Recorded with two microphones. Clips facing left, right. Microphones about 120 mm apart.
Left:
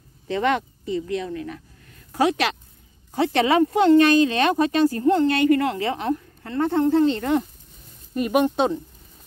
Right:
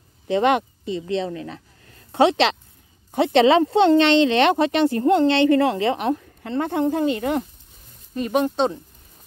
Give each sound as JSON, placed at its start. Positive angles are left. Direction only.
{"t": 0.3, "sound": "speech", "side_deg": -25}
{"t": 8.1, "sound": "speech", "side_deg": 10}